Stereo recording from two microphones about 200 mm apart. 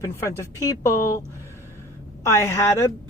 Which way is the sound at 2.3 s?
15° left (ahead or behind).